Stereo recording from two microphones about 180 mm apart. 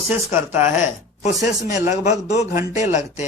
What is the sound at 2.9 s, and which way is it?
Speech, 40° left (ahead or behind).